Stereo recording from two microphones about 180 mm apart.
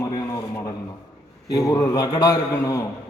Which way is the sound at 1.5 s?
20° left (ahead or behind).